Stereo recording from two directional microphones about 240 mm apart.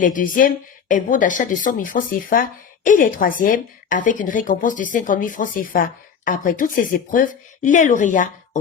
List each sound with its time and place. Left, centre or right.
0.0 s a woman's voice: left